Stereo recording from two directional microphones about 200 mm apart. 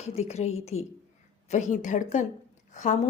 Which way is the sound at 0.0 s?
35° left (ahead or behind).